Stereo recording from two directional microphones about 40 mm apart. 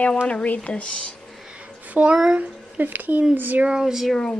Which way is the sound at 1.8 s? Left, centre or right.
Right.